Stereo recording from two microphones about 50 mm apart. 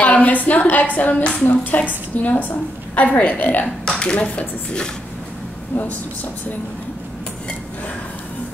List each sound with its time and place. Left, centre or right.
0.0 s a woman's voice: left
4.0 s speech: left